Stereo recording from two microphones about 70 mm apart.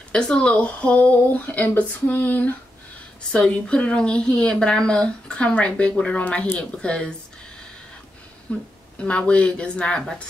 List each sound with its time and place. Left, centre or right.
0.1 s speech: centre
3.3 s a woman's voice: centre
6.8 s a woman's voice: centre
8.5 s a woman's voice: centre